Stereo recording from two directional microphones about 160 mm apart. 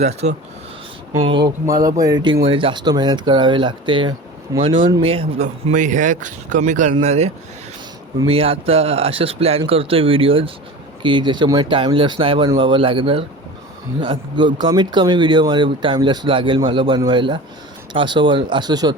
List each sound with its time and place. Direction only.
0.0 s speech: 45° right (ahead or behind)
1.6 s speech: 20° right (ahead or behind)
4.9 s speech: 35° right (ahead or behind)
8.3 s speech: 35° right (ahead or behind)